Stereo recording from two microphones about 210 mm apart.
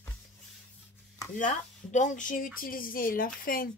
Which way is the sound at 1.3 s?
35° left (ahead or behind).